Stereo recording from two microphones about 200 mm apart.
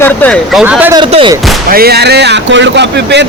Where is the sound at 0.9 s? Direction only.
25° right (ahead or behind).